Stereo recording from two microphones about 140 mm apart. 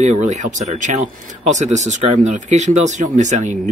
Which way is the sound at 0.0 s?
60° right (ahead or behind).